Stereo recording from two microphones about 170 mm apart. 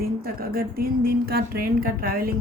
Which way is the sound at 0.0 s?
60° right (ahead or behind).